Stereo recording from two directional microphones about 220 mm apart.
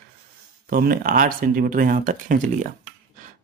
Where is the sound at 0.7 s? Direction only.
40° right (ahead or behind).